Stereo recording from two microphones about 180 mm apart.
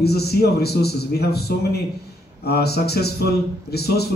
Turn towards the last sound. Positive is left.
turn(degrees=60)  # may be behind; listen again after turning